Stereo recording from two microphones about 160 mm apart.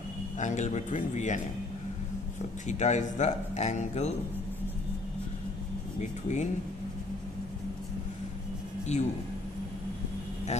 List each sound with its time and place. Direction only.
0.3 s speech: 50° left (ahead or behind)
2.6 s speech: 45° left (ahead or behind)
6.0 s speech: 45° left (ahead or behind)
8.9 s speech: 45° left (ahead or behind)